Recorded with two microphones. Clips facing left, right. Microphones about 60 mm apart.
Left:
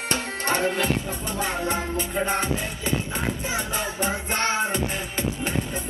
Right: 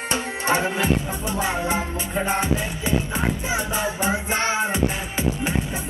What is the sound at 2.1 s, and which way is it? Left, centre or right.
Music, right.